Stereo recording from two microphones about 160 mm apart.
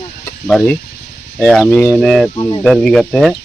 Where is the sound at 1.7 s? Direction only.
15° left (ahead or behind).